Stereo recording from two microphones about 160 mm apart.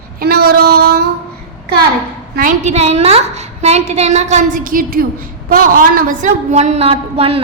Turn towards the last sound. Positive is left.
turn(degrees=-35)  # may be behind; listen again after turning